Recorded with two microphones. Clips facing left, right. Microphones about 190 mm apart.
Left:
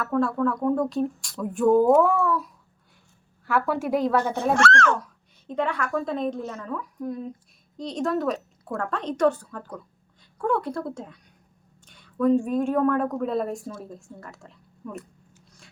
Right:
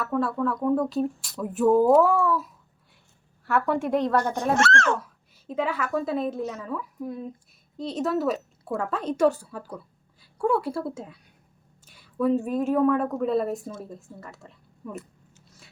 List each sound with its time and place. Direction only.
0.0 s speech: centre (ahead or behind)
4.5 s speech: 25° right (ahead or behind)
5.5 s speech: 5° right (ahead or behind)